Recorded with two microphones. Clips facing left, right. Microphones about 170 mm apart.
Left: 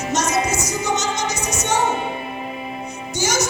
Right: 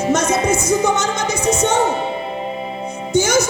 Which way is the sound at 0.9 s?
55° right (ahead or behind).